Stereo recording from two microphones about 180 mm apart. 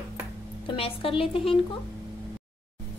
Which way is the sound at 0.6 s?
30° left (ahead or behind).